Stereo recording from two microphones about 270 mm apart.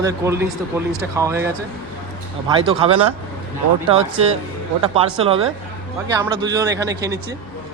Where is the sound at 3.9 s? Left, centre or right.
Right.